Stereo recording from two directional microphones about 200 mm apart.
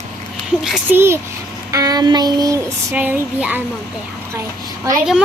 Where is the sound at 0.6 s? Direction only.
5° right (ahead or behind).